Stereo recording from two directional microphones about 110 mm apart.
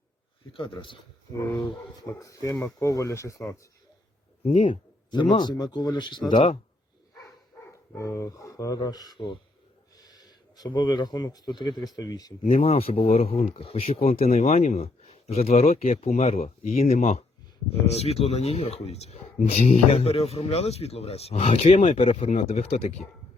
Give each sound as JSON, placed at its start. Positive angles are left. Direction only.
{"t": 0.5, "sound": "speech", "side_deg": 50}
{"t": 1.3, "sound": "speech", "side_deg": 25}
{"t": 4.5, "sound": "speech", "side_deg": 50}
{"t": 7.7, "sound": "speech", "side_deg": 30}
{"t": 10.0, "sound": "a sound", "side_deg": 40}
{"t": 10.8, "sound": "speech", "side_deg": 45}
{"t": 12.5, "sound": "speech", "side_deg": 65}
{"t": 17.7, "sound": "speech", "side_deg": 70}
{"t": 21.8, "sound": "speech", "side_deg": 60}